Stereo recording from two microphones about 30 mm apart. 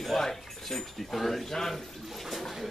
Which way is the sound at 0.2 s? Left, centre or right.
Centre.